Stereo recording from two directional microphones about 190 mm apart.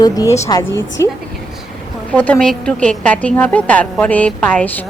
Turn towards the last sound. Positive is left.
turn(degrees=10)  # may be behind; listen again after turning